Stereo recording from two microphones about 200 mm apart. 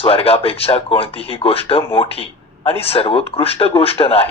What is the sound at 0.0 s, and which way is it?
Speech, 30° left (ahead or behind).